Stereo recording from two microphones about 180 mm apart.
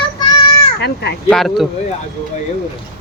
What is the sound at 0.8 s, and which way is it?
Speech, 65° left (ahead or behind).